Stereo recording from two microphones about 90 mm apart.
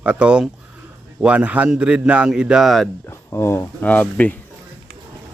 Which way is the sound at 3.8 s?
15° left (ahead or behind).